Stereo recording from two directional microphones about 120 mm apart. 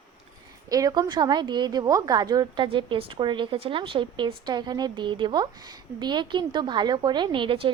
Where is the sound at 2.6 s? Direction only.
45° right (ahead or behind).